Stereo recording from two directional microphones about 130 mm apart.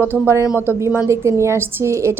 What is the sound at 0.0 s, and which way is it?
A woman's voice, 15° right (ahead or behind).